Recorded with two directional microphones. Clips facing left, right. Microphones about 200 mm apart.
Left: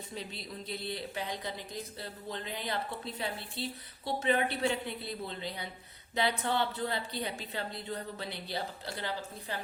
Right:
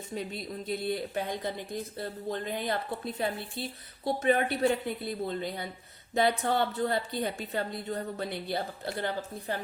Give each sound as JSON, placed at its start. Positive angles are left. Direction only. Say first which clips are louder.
{"t": 0.2, "sound": "speech", "louder": "right 7 dB", "side_deg": -50}